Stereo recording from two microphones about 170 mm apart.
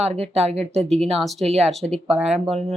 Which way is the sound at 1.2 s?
Centre (ahead or behind).